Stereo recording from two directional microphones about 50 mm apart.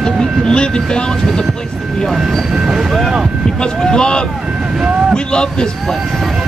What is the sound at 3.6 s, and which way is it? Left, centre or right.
Speech, centre.